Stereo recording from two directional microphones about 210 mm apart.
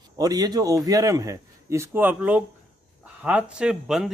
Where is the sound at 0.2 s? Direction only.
20° right (ahead or behind).